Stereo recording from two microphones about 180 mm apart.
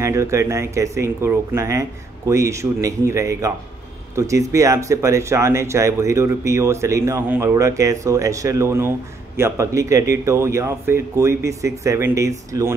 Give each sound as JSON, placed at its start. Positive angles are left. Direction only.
{"t": 0.0, "sound": "speech", "side_deg": -15}